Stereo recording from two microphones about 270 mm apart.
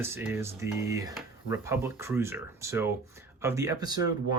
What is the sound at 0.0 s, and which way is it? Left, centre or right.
Speech, centre.